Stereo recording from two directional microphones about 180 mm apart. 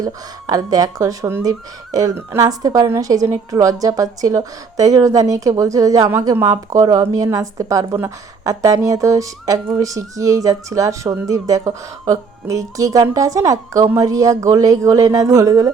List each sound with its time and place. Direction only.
0.0 s speech: 20° right (ahead or behind)